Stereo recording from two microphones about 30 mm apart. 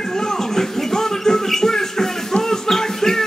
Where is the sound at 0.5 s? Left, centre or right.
Centre.